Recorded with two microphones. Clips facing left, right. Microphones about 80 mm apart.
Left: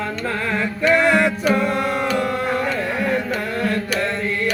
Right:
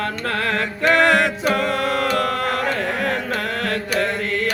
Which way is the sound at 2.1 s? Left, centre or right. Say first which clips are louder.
Even; right.